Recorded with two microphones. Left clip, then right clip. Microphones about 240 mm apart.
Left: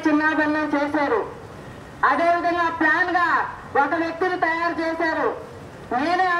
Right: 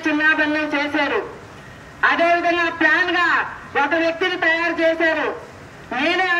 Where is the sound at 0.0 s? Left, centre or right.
Centre.